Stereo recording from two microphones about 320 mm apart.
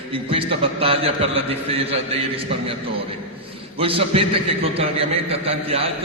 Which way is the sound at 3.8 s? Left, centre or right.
Centre.